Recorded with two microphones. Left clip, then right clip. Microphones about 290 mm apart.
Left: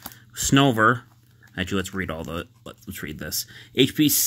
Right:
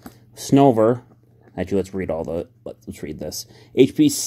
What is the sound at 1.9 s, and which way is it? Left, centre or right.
Speech, left.